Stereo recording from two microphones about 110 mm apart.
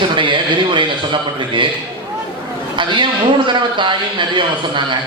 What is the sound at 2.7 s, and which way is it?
A man's voice, 45° right (ahead or behind).